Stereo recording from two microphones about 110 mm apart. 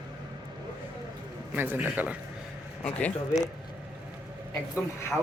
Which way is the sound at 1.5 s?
20° right (ahead or behind).